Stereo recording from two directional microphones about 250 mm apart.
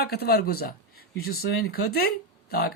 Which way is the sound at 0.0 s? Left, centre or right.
Left.